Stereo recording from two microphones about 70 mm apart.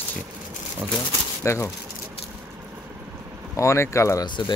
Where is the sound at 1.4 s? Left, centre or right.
Left.